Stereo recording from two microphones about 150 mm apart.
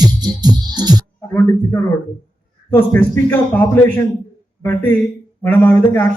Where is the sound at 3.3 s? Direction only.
15° left (ahead or behind).